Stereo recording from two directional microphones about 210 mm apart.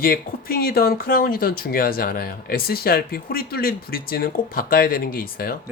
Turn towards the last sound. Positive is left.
turn(degrees=45)  # may be behind; listen again after turning